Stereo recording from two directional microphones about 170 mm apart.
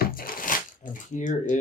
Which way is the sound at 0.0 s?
55° left (ahead or behind).